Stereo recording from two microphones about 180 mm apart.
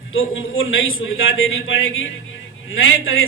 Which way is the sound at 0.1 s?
90° left.